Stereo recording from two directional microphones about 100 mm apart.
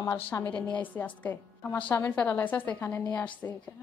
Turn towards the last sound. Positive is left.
turn(degrees=15)  # may be behind; listen again after turning